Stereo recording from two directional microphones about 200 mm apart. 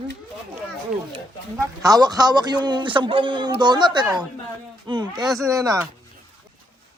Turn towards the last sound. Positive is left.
turn(degrees=-20)  # may be behind; listen again after turning